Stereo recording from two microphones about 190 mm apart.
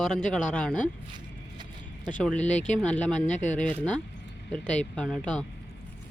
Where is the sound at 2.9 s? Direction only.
5° left (ahead or behind).